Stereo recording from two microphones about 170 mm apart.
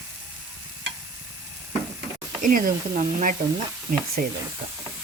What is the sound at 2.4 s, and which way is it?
Speech, 50° right (ahead or behind).